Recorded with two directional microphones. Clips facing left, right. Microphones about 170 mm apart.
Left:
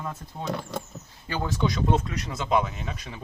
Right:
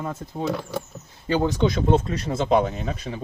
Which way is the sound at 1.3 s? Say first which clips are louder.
Right 7 dB; 25° right (ahead or behind).